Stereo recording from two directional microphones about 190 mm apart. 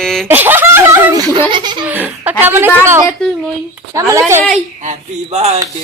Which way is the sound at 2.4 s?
10° right (ahead or behind).